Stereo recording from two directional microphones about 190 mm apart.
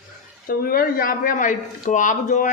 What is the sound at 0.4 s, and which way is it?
Speech, 50° left (ahead or behind).